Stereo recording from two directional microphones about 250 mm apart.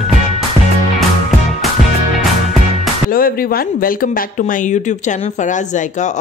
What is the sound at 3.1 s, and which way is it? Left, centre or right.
Speech, left.